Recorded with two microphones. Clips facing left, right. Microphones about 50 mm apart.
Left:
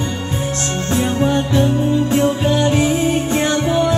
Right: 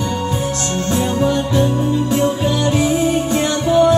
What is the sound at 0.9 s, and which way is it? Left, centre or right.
Music, left.